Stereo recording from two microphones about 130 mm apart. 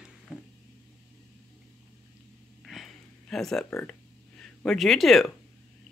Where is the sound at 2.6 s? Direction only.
Centre (ahead or behind).